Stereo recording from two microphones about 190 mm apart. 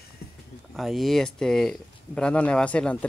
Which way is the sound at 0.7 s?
Centre (ahead or behind).